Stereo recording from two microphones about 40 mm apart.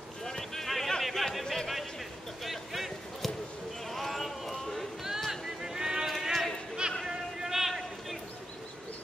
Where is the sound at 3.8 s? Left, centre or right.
Centre.